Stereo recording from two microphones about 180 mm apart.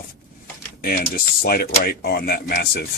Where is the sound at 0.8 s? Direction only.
50° left (ahead or behind).